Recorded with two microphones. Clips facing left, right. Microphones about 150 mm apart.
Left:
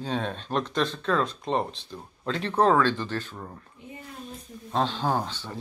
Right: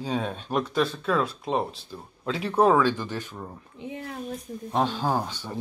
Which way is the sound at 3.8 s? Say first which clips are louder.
Right 9 dB; 90° right.